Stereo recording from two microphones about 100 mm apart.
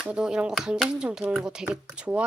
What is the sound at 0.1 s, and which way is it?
A woman's voice, 10° right (ahead or behind).